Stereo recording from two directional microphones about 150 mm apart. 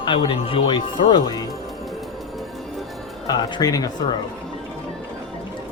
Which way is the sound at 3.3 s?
25° left (ahead or behind).